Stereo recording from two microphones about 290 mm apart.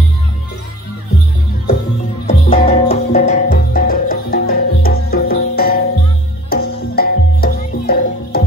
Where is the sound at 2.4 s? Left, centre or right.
Centre.